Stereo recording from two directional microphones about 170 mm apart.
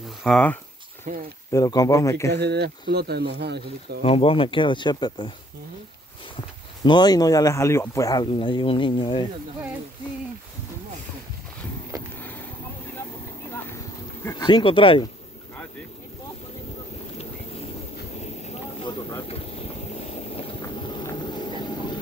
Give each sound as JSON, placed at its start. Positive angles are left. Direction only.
{"t": 0.2, "sound": "speech", "side_deg": 5}
{"t": 1.1, "sound": "speech", "side_deg": -50}
{"t": 1.5, "sound": "speech", "side_deg": 20}
{"t": 2.3, "sound": "speech", "side_deg": -80}
{"t": 4.0, "sound": "speech", "side_deg": 35}
{"t": 6.8, "sound": "speech", "side_deg": 25}
{"t": 12.2, "sound": "vehicle", "side_deg": 10}
{"t": 14.2, "sound": "speech", "side_deg": 25}
{"t": 18.2, "sound": "boat", "side_deg": 40}
{"t": 19.2, "sound": "vehicle", "side_deg": 35}